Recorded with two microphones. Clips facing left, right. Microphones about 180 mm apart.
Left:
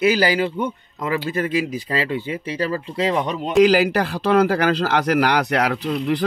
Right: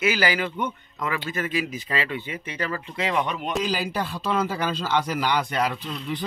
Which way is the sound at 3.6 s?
80° left.